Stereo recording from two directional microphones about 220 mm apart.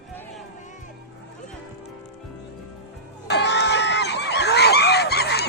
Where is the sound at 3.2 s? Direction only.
50° left (ahead or behind).